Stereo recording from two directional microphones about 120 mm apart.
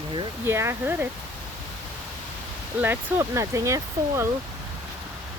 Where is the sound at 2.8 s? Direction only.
20° right (ahead or behind).